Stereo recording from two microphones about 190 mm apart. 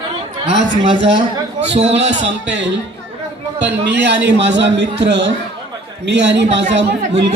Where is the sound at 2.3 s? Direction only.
70° right (ahead or behind).